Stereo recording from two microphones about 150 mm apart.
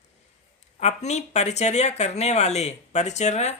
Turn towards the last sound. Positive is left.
turn(degrees=50)  # may be behind; listen again after turning